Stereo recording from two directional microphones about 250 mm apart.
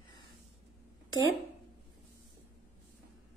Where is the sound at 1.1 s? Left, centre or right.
Left.